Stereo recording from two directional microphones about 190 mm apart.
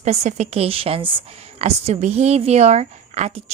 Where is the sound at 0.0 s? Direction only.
35° right (ahead or behind).